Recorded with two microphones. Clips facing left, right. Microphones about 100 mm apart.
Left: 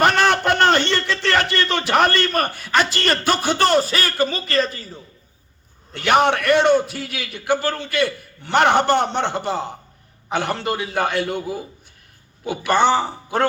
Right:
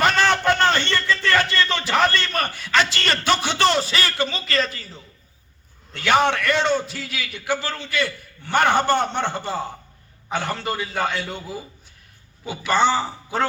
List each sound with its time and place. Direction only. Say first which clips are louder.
0.0 s a sound: left 2 dB; 55° left (ahead or behind)
3.1 s speech: left 2 dB; 45° left (ahead or behind)
5.9 s a man's voice: left 2 dB; 55° left (ahead or behind)